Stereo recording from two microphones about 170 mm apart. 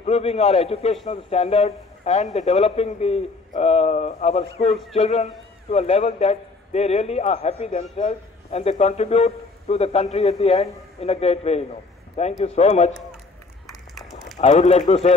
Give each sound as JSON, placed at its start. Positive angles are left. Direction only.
{"t": 0.0, "sound": "a man's voice", "side_deg": 40}
{"t": 14.4, "sound": "a man's voice", "side_deg": 40}